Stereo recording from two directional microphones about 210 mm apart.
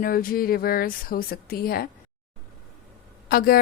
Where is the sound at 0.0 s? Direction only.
45° left (ahead or behind).